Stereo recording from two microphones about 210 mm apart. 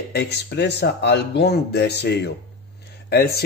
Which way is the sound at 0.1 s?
50° left (ahead or behind).